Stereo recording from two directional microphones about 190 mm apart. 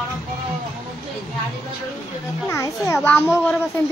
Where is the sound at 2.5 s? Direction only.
15° left (ahead or behind).